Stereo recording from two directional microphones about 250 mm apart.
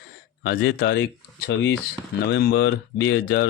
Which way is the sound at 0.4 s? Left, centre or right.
Left.